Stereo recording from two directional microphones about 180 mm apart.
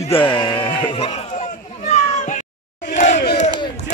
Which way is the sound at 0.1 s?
25° left (ahead or behind).